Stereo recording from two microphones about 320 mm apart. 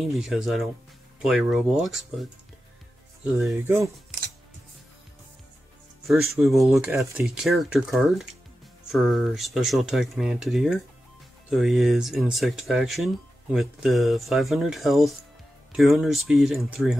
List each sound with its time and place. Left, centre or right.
0.0 s speech: centre
3.3 s speech: centre
6.3 s speech: centre